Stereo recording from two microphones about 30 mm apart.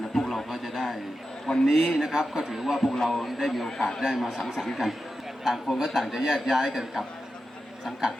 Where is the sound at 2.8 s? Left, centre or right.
Centre.